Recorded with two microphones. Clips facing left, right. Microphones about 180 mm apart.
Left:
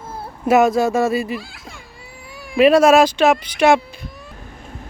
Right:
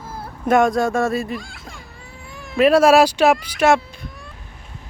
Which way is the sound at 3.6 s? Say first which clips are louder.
Left 4 dB; centre (ahead or behind).